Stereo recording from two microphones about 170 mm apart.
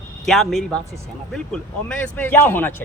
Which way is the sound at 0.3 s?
Centre (ahead or behind).